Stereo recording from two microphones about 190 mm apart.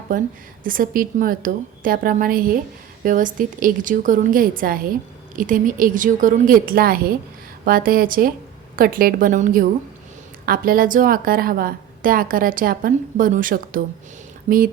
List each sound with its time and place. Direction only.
0.1 s a woman's voice: 45° right (ahead or behind)